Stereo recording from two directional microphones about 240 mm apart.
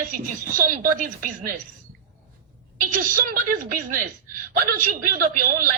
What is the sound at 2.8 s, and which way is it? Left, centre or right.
Speech, right.